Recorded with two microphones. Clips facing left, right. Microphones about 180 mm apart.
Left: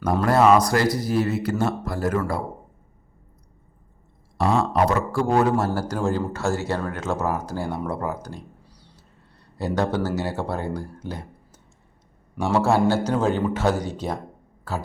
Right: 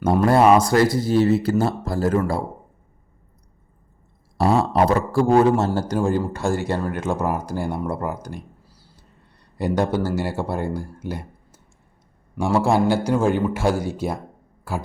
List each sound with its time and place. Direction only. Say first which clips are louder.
0.0 s speech: right 2 dB; 25° right (ahead or behind)
4.4 s a man's voice: right 2 dB; 35° right (ahead or behind); by 8.4 s 10° right (ahead or behind)
8.6 s whispering: left 1 dB; 5° right (ahead or behind)
9.6 s a man's voice: right 2 dB; 15° right (ahead or behind)